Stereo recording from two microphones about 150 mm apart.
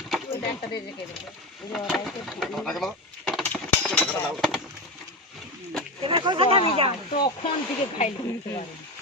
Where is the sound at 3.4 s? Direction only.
10° left (ahead or behind).